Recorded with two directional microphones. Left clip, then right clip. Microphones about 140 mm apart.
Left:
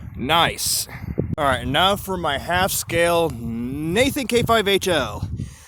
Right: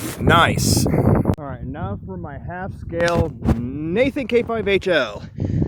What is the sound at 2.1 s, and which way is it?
Speech, 40° left (ahead or behind).